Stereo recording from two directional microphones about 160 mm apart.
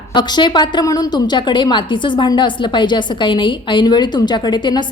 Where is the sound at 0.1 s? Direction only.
30° left (ahead or behind).